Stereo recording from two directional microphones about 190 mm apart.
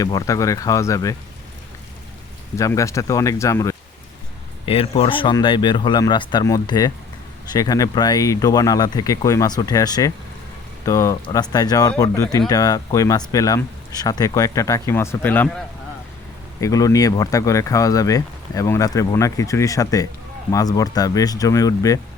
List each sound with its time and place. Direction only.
0.0 s speech: 20° left (ahead or behind)
2.6 s speech: 15° left (ahead or behind)
4.6 s speech: 30° left (ahead or behind); by 15.4 s 10° left (ahead or behind)
16.6 s speech: 15° left (ahead or behind)